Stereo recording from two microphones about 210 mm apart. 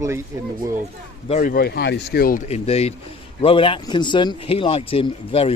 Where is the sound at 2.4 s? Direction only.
30° left (ahead or behind).